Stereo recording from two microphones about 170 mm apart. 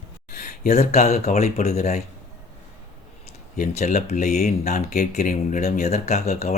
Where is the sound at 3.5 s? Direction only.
45° left (ahead or behind).